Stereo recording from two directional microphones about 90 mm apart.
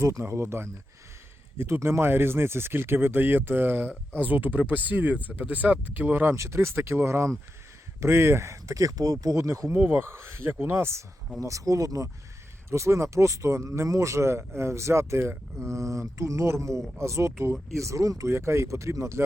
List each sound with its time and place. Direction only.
0.0 s speech: 30° right (ahead or behind)
6.3 s speech: 30° right (ahead or behind)
9.7 s speech: 25° right (ahead or behind)
11.3 s speech: 40° right (ahead or behind)